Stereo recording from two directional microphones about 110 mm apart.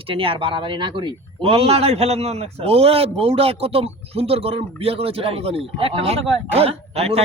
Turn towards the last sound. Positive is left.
turn(degrees=-65)  # may be behind; listen again after turning